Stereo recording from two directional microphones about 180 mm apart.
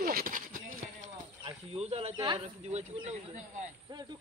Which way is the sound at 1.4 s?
35° right (ahead or behind).